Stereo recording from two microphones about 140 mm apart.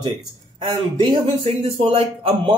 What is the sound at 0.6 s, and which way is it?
Speech, 35° right (ahead or behind).